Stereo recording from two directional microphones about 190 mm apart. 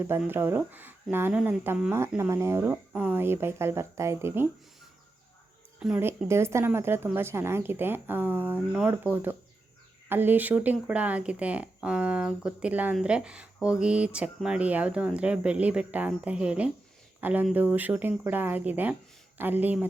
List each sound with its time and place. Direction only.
0.0 s speech: 10° right (ahead or behind)
5.8 s speech: 10° right (ahead or behind)